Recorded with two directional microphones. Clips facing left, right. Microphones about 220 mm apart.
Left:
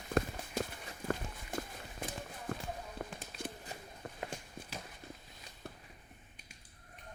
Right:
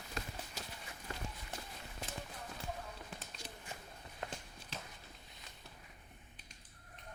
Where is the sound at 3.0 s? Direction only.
60° left (ahead or behind).